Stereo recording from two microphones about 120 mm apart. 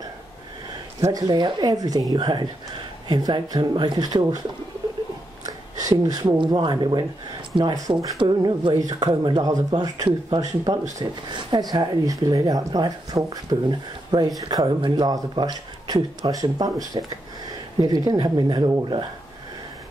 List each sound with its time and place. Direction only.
1.0 s a woman's voice: 30° right (ahead or behind)
5.4 s a sound: 30° right (ahead or behind)
6.2 s a woman's voice: 45° right (ahead or behind)